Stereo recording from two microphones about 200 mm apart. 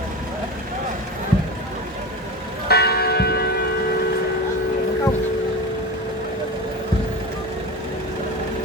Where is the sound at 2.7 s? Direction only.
50° left (ahead or behind).